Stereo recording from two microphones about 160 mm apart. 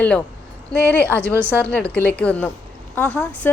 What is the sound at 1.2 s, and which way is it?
Speech, 15° right (ahead or behind).